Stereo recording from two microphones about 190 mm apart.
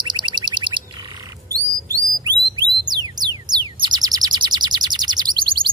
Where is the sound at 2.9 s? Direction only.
20° right (ahead or behind).